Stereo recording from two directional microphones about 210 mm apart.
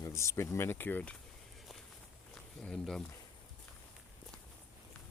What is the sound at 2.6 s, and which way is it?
Speech, 5° left (ahead or behind).